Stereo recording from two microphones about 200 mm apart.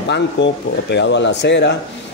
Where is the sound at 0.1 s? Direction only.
60° left (ahead or behind).